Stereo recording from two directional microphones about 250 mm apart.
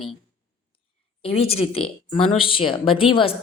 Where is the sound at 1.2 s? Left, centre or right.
Left.